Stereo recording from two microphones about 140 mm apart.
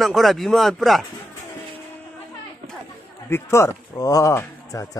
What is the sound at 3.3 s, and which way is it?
A man's voice, 20° left (ahead or behind).